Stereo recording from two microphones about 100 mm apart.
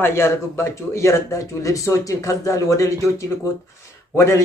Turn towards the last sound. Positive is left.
turn(degrees=30)  # may be behind; listen again after turning